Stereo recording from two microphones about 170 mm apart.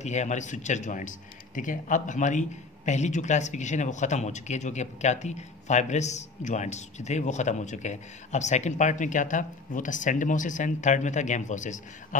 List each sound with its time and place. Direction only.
0.0 s a man's voice: 45° left (ahead or behind)